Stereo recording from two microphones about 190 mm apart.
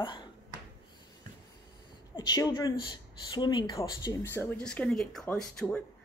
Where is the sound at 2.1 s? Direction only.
20° left (ahead or behind).